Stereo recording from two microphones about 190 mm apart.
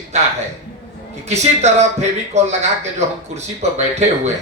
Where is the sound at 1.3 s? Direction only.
35° right (ahead or behind).